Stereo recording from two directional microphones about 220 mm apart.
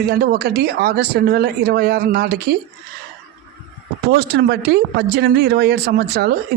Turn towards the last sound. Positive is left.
turn(degrees=-45)  # may be behind; listen again after turning